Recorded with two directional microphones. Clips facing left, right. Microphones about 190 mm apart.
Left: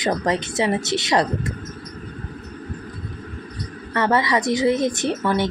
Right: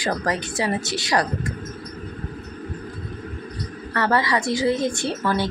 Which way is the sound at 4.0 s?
20° left (ahead or behind).